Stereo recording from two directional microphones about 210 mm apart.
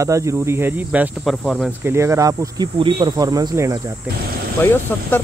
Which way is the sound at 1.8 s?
15° right (ahead or behind).